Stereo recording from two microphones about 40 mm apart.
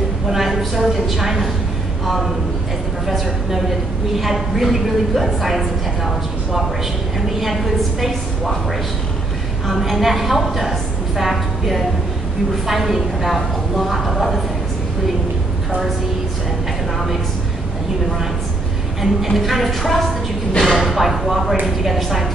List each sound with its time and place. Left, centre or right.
0.3 s a woman's voice: centre
3.1 s a woman's voice: centre
9.7 s a woman's voice: centre
18.9 s a woman's voice: centre